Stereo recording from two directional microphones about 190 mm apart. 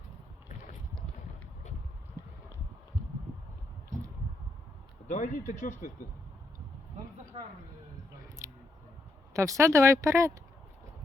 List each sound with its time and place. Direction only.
5.0 s speech: 40° left (ahead or behind)
7.3 s a sound: 35° right (ahead or behind)
9.3 s speech: 15° right (ahead or behind)